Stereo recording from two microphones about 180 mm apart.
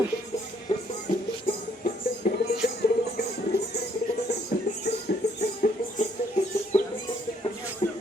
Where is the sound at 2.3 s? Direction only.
55° left (ahead or behind).